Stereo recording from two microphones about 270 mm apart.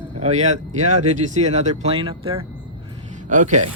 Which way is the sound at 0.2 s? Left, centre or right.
Right.